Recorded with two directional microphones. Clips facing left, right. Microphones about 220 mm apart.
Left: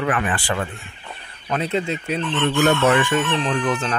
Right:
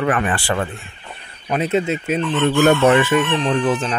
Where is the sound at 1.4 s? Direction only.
15° right (ahead or behind).